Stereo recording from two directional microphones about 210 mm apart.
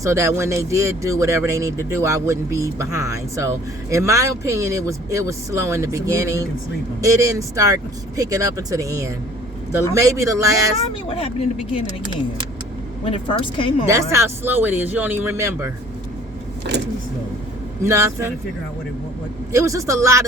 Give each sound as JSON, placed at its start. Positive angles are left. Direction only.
{"t": 0.0, "sound": "a man's voice", "side_deg": -15}
{"t": 11.1, "sound": "a woman's voice", "side_deg": 30}
{"t": 13.1, "sound": "a woman's voice", "side_deg": 25}
{"t": 13.8, "sound": "a man's voice", "side_deg": -15}
{"t": 17.8, "sound": "a man's voice", "side_deg": -15}
{"t": 19.5, "sound": "a man's voice", "side_deg": -15}